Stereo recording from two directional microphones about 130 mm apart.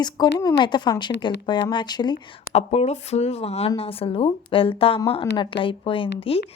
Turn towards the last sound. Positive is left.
turn(degrees=45)  # may be behind; listen again after turning